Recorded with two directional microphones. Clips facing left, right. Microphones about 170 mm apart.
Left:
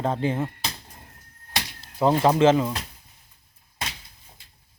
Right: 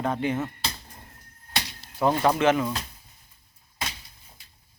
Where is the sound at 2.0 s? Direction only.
25° left (ahead or behind).